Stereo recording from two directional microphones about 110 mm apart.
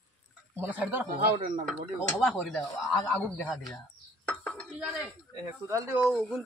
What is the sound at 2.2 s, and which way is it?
Speech, 5° left (ahead or behind).